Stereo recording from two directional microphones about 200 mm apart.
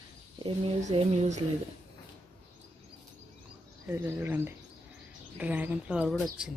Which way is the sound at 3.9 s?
10° right (ahead or behind).